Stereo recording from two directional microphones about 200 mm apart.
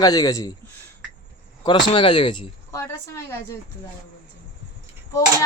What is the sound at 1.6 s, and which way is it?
Speech, 25° left (ahead or behind).